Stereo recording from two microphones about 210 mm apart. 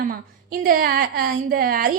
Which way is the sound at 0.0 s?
45° right (ahead or behind).